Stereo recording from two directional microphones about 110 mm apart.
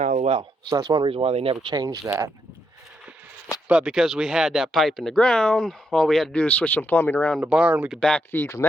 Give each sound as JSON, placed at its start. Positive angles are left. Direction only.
{"t": 0.0, "sound": "a sound", "side_deg": -90}
{"t": 0.7, "sound": "speech", "side_deg": -35}
{"t": 1.1, "sound": "speech", "side_deg": -65}
{"t": 1.6, "sound": "speech", "side_deg": -35}
{"t": 3.7, "sound": "speech", "side_deg": -10}
{"t": 7.4, "sound": "speech", "side_deg": -10}
{"t": 8.3, "sound": "speech", "side_deg": 20}